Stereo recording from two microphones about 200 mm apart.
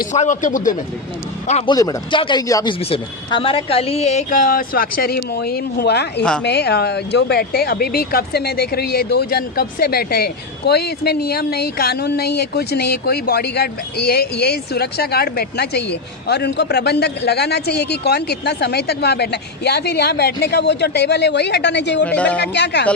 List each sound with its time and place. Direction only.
0.1 s speech: 40° left (ahead or behind)
1.7 s speech: 20° left (ahead or behind); by 22.0 s 60° left (ahead or behind)
22.0 s speech: 5° left (ahead or behind)
22.4 s speech: 55° left (ahead or behind)